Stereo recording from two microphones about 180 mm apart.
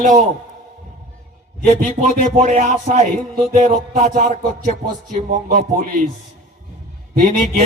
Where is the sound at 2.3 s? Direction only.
45° right (ahead or behind).